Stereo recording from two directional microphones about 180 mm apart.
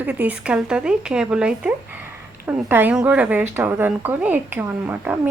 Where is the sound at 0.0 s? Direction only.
10° right (ahead or behind).